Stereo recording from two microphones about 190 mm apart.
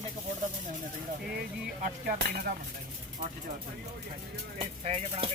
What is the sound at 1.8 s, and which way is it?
Speech, 50° right (ahead or behind).